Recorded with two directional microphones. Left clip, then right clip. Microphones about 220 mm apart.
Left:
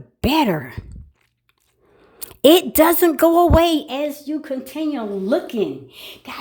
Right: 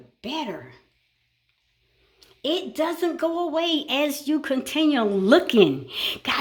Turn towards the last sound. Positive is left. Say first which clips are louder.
# right 10 dB
turn(degrees=-20)  # may be behind; listen again after turning